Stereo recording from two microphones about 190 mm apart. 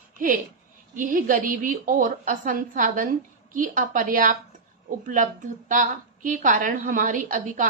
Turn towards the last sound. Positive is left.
turn(degrees=-45)  # may be behind; listen again after turning